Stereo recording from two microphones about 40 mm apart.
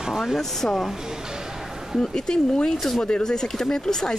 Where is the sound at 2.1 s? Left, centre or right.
Centre.